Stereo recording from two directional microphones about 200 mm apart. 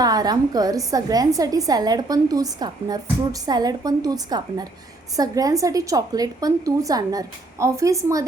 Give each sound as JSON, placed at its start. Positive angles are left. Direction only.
{"t": 0.0, "sound": "a woman's voice", "side_deg": -20}